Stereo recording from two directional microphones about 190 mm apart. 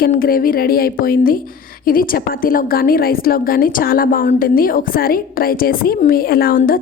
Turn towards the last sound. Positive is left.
turn(degrees=50)  # may be behind; listen again after turning